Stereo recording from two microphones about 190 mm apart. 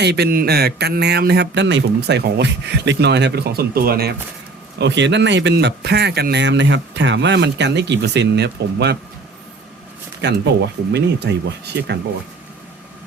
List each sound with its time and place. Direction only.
0.0 s speech: 60° right (ahead or behind)
4.8 s speech: 65° right (ahead or behind)
10.9 s speech: 65° right (ahead or behind)